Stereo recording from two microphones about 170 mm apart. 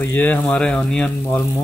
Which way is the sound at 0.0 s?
10° left (ahead or behind).